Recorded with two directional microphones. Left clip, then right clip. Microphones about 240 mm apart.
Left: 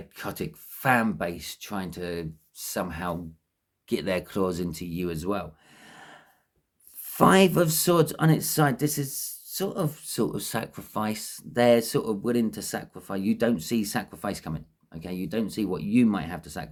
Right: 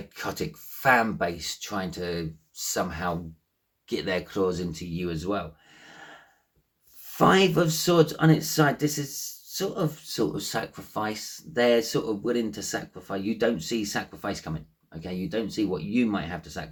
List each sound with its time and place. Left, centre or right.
0.1 s speech: left